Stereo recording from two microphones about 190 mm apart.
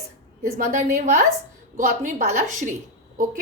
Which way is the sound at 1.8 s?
45° right (ahead or behind).